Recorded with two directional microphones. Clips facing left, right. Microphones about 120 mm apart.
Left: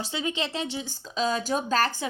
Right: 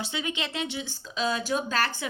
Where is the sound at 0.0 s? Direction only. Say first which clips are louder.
Left 2 dB; 35° left (ahead or behind).